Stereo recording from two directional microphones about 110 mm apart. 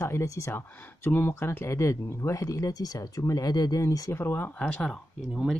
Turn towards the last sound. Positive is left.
turn(degrees=-5)  # may be behind; listen again after turning